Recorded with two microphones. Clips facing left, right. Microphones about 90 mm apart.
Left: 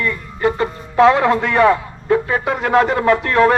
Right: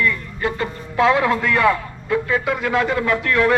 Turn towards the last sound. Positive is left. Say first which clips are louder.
# left 5 dB
turn(degrees=35)  # may be behind; listen again after turning